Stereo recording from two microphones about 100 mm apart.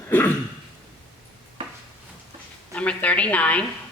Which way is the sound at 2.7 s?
15° left (ahead or behind).